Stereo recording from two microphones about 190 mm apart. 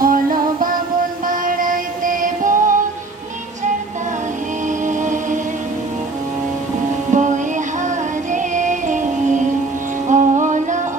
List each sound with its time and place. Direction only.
0.0 s music: 45° right (ahead or behind)
4.9 s music: 40° right (ahead or behind)
7.1 s music: 40° right (ahead or behind)